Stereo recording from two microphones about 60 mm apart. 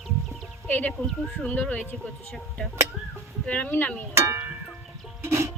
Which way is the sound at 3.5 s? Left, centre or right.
Left.